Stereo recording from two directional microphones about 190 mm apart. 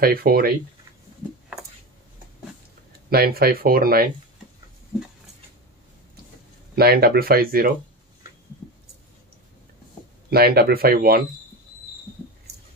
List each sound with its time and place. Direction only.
0.0 s speech: 50° right (ahead or behind)
3.1 s speech: 55° right (ahead or behind)
6.7 s speech: 55° right (ahead or behind)
10.3 s speech: 55° right (ahead or behind)